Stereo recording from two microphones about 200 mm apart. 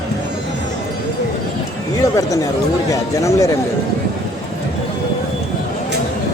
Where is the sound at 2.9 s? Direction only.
15° left (ahead or behind).